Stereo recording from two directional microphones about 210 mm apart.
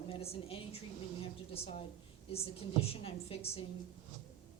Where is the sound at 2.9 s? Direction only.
25° left (ahead or behind).